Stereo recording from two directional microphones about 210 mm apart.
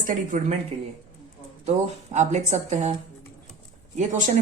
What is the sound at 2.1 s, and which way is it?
Speech, 35° right (ahead or behind).